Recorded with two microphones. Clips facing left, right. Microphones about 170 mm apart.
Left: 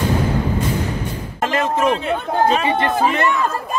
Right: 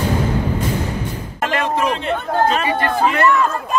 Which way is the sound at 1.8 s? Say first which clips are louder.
Left 2 dB; centre (ahead or behind).